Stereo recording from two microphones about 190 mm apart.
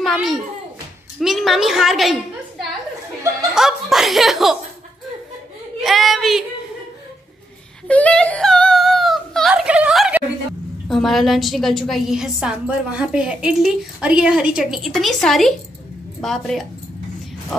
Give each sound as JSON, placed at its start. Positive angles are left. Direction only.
{"t": 0.0, "sound": "a sound", "side_deg": 0}
{"t": 1.2, "sound": "a woman's voice", "side_deg": 0}
{"t": 3.5, "sound": "a woman's voice", "side_deg": 0}
{"t": 5.9, "sound": "child singing", "side_deg": 0}
{"t": 7.9, "sound": "a sound", "side_deg": 5}
{"t": 10.9, "sound": "a woman's voice", "side_deg": 0}